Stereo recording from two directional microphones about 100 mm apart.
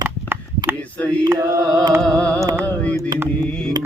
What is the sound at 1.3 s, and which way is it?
Mantra, 30° right (ahead or behind).